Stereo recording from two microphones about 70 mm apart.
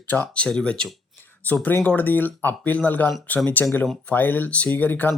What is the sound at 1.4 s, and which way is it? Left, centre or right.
Speech, left.